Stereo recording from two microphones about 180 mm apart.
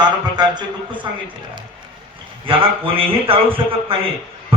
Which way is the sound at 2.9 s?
30° right (ahead or behind).